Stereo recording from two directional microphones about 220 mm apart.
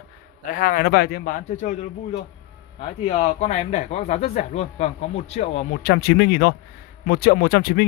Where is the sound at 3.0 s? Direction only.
30° left (ahead or behind).